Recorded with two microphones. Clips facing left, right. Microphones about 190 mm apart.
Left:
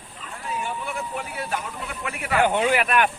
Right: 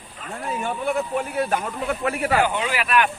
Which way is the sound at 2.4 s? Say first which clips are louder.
Left 2 dB; 50° left (ahead or behind).